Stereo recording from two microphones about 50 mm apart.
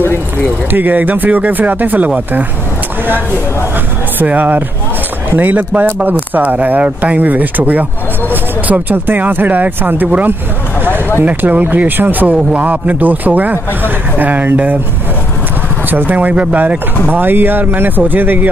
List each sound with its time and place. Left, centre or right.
0.7 s speech: right
4.3 s speech: right
15.9 s speech: right